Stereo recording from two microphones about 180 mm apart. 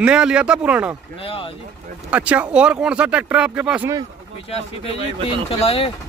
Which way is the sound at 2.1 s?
10° right (ahead or behind).